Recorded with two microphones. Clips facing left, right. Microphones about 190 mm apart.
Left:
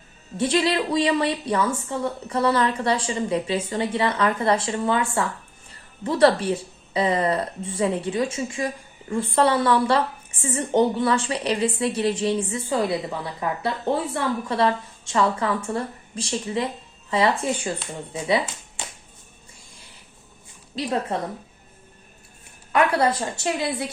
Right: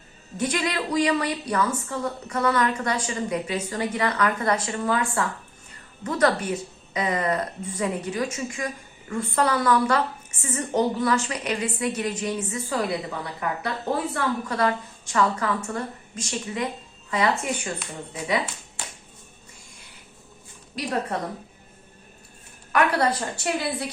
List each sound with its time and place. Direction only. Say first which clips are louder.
0.3 s a woman's voice: left 5 dB; 30° left (ahead or behind)
20.7 s a woman's voice: left 3 dB; 25° left (ahead or behind)
22.7 s a woman's voice: left 2 dB; 25° left (ahead or behind)